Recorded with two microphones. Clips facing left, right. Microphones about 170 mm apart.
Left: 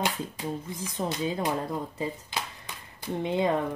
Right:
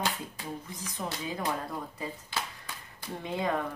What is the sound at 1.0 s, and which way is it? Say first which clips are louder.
Speech: left 5 dB; 25° left (ahead or behind).